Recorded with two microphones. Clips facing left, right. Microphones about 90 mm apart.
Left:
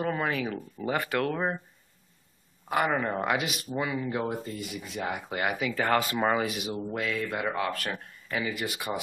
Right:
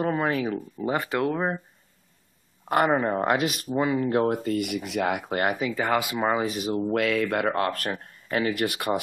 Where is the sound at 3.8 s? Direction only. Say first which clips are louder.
Right 8 dB; 50° right (ahead or behind); by 5.2 s 75° right (ahead or behind).